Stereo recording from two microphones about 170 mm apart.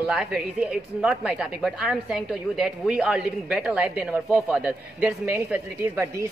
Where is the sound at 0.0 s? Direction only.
5° right (ahead or behind).